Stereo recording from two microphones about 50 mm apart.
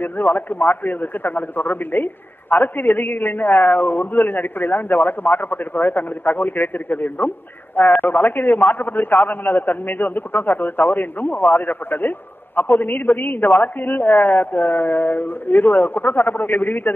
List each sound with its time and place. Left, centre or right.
0.0 s a man's voice: left